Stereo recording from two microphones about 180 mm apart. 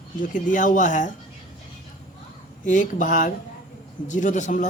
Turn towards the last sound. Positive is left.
turn(degrees=45)  # may be behind; listen again after turning